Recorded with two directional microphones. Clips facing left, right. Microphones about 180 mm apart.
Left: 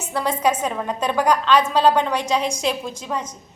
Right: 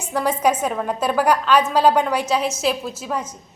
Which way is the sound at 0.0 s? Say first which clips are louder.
Right 2 dB; 10° right (ahead or behind).